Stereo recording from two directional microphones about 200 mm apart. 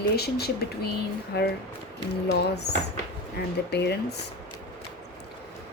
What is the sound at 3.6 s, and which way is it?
Speech, 55° left (ahead or behind).